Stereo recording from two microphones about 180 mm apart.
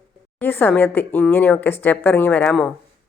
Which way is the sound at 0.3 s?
10° left (ahead or behind).